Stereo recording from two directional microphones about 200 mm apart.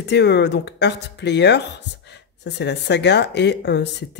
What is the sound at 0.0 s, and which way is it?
Speech, 60° left (ahead or behind).